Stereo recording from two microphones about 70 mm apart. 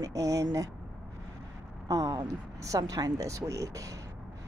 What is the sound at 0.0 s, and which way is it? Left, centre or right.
Speech, right.